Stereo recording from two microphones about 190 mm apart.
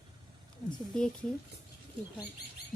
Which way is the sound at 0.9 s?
5° left (ahead or behind).